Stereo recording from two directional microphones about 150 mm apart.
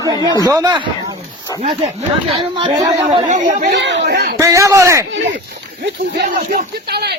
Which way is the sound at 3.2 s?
55° right (ahead or behind).